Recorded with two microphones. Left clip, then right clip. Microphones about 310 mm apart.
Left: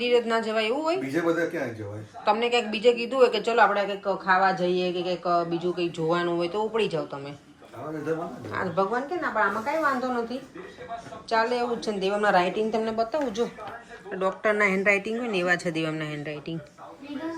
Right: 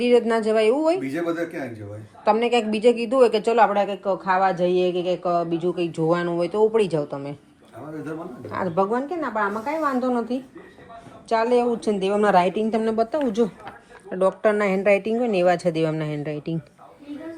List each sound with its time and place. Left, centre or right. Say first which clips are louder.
0.0 s speech: right 4 dB; centre
2.2 s speech: right 4 dB; right
8.5 s a woman's voice: right 3 dB; right